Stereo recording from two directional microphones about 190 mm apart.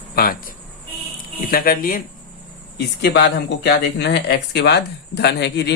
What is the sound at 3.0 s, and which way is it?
Speech, 65° left (ahead or behind).